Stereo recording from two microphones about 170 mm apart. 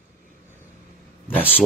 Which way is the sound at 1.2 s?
10° left (ahead or behind).